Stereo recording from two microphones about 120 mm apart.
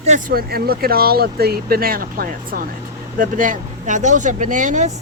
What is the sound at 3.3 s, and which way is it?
Speech, 90° right.